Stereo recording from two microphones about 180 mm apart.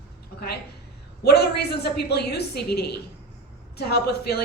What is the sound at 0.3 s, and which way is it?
A woman's voice, 60° left (ahead or behind).